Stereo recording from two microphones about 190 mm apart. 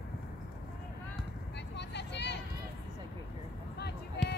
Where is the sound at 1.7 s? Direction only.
65° left (ahead or behind).